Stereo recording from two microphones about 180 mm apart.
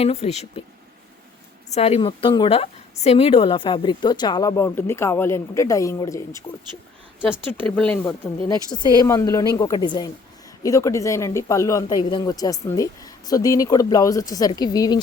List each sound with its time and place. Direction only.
0.0 s speech: 35° left (ahead or behind)
1.7 s a woman's voice: 35° left (ahead or behind); by 6.4 s 15° left (ahead or behind)
7.6 s speech: 5° left (ahead or behind)
8.5 s a woman's voice: 25° left (ahead or behind)